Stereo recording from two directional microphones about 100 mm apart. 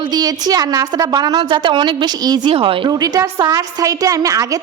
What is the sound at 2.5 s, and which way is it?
Speech, 65° right (ahead or behind).